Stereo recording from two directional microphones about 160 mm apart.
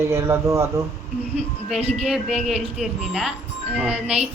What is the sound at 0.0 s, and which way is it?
Speech, 15° right (ahead or behind).